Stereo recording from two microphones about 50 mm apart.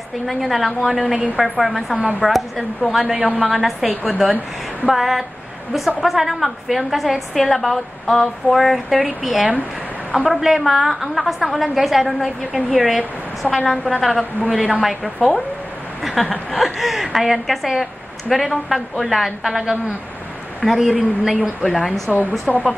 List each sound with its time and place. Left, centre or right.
0.3 s a woman's voice: centre
14.7 s a woman's voice: centre
16.0 s a sound: centre
16.4 s a woman's voice: centre
20.6 s a woman's voice: centre
21.8 s a woman's voice: centre
22.5 s speech: left